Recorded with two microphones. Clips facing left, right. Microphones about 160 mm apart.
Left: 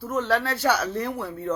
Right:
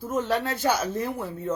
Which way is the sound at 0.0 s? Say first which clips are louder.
Left 1 dB; 15° right (ahead or behind).